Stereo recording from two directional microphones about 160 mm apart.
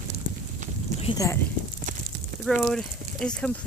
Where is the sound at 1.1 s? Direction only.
20° left (ahead or behind).